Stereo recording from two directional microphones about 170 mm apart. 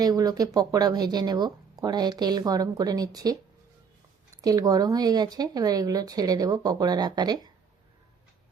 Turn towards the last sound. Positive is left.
turn(degrees=-25)  # may be behind; listen again after turning